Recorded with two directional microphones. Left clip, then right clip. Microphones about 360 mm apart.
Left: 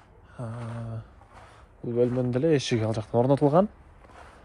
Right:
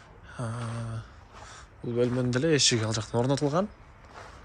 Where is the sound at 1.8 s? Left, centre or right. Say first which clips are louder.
Left 2 dB; centre.